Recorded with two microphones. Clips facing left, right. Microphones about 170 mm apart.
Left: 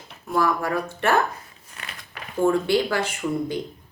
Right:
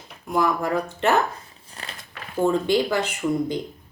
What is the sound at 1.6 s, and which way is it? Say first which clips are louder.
Crumpling: right 4 dB; 30° right (ahead or behind).